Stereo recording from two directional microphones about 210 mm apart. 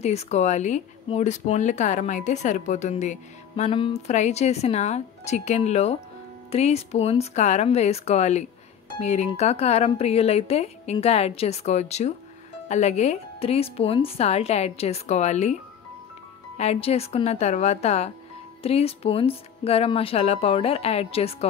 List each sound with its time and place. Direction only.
0.0 s speech: 30° left (ahead or behind)
16.5 s speech: 30° left (ahead or behind)